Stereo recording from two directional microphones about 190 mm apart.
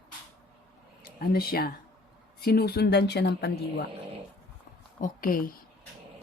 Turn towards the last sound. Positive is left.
turn(degrees=50)  # may be behind; listen again after turning